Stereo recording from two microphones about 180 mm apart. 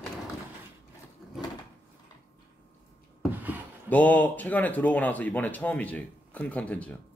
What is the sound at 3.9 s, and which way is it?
Speech, 10° left (ahead or behind).